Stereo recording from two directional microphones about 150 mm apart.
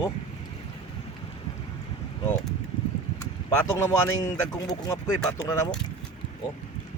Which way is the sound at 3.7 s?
25° left (ahead or behind).